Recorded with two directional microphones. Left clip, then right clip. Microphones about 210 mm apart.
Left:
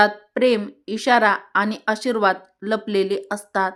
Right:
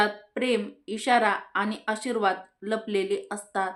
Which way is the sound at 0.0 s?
45° left (ahead or behind).